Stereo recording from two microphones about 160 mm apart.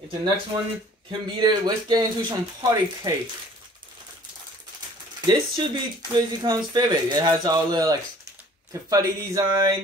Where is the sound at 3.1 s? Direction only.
25° right (ahead or behind).